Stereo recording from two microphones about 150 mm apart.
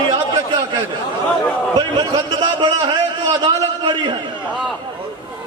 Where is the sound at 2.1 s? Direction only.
30° right (ahead or behind).